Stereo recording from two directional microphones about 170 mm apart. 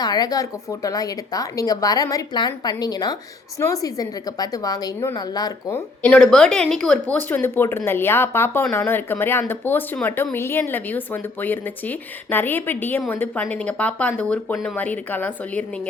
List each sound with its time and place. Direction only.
0.0 s a woman's voice: 25° left (ahead or behind)